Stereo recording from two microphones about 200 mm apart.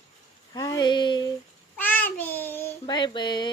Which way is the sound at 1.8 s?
10° left (ahead or behind).